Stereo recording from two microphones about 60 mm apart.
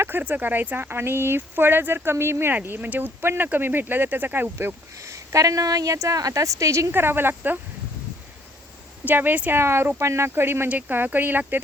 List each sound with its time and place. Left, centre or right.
0.1 s speech: right
2.6 s speech: right
5.1 s a woman's voice: right
6.9 s speech: right
9.0 s speech: right
9.5 s speech: right
10.7 s speech: right